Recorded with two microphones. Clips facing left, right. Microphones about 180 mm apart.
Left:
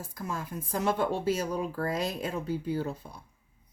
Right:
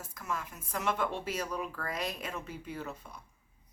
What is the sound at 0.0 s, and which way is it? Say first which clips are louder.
Speech: left 3 dB; 30° left (ahead or behind).